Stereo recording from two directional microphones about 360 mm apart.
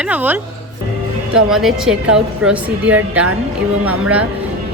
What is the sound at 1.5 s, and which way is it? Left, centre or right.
Speech, centre.